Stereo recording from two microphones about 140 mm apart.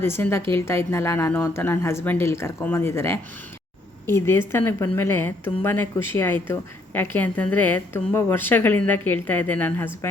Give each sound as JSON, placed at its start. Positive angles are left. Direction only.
{"t": 0.0, "sound": "a woman's voice", "side_deg": 15}